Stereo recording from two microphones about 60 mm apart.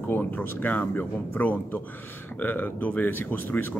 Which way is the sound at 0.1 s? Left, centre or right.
Left.